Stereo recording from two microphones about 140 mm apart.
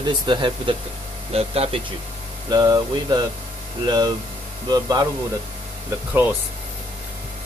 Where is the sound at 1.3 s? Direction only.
45° right (ahead or behind).